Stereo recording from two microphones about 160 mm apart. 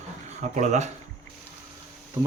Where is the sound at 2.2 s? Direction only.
25° right (ahead or behind).